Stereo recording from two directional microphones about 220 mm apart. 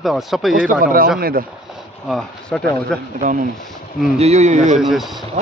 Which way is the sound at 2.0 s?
Centre (ahead or behind).